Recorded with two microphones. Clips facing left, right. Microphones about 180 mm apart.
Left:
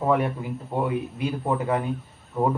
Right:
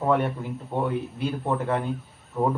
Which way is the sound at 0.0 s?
Centre (ahead or behind).